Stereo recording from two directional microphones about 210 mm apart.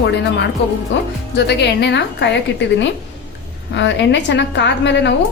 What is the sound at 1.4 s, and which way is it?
A woman's voice, 55° left (ahead or behind).